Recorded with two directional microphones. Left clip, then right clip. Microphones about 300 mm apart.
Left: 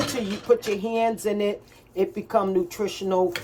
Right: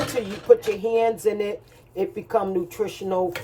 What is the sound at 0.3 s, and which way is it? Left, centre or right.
Speech, centre.